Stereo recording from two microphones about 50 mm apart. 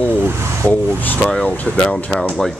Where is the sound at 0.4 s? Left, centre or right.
Right.